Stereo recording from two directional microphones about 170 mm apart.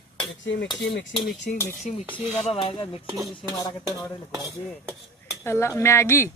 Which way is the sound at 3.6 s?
20° left (ahead or behind).